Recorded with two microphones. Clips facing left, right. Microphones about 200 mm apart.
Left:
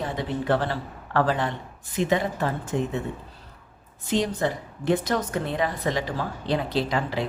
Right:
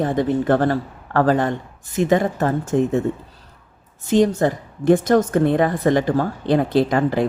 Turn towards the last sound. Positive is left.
turn(degrees=-50)  # may be behind; listen again after turning